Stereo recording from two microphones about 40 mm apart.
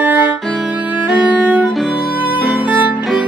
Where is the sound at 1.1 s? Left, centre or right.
Right.